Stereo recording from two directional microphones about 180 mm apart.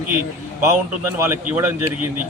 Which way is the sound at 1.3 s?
10° right (ahead or behind).